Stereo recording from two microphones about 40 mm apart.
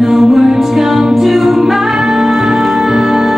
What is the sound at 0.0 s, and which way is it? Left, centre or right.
A capella, centre.